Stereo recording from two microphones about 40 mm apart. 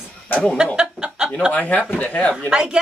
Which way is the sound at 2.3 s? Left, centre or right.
Right.